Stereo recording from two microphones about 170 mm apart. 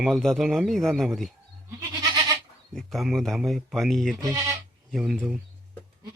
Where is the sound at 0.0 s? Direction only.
Centre (ahead or behind).